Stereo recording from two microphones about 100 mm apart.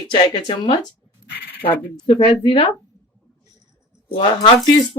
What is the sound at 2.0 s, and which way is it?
Speech, 65° left (ahead or behind).